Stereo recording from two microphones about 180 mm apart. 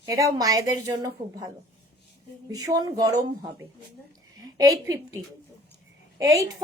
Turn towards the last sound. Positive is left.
turn(degrees=-15)  # may be behind; listen again after turning